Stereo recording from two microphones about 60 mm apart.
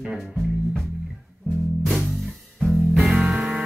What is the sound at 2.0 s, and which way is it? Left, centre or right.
Music, centre.